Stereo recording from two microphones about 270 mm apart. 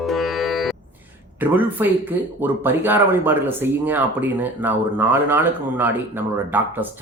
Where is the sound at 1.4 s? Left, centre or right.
Centre.